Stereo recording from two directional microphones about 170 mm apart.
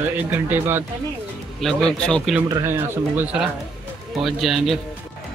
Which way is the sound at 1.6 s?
5° left (ahead or behind).